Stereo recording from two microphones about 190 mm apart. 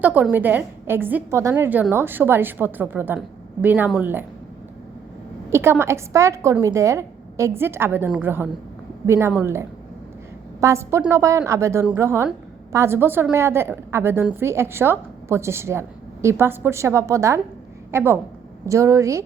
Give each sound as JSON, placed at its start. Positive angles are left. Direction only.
{"t": 0.0, "sound": "a woman's voice", "side_deg": -10}
{"t": 5.5, "sound": "a woman's voice", "side_deg": -15}